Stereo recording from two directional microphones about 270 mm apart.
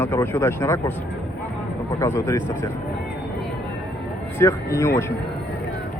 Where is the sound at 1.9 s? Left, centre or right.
Centre.